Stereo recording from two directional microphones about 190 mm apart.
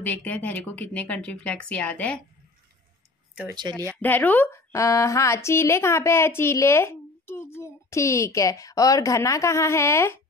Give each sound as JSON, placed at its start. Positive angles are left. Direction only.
{"t": 0.0, "sound": "speech", "side_deg": 10}
{"t": 3.4, "sound": "speech", "side_deg": -25}
{"t": 4.0, "sound": "speech", "side_deg": 10}